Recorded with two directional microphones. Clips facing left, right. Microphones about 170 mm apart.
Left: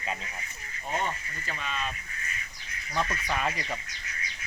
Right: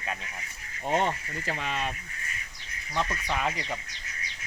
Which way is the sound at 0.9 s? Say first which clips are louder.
Right 5 dB; 80° right.